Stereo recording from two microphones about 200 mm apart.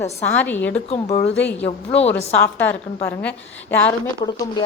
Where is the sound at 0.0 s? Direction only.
10° left (ahead or behind).